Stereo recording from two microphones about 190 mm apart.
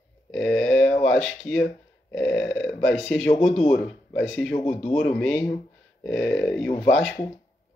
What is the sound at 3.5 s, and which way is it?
Speech, 40° left (ahead or behind).